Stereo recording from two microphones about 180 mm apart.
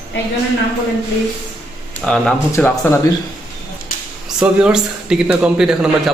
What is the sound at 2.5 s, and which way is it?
Speech, 10° left (ahead or behind).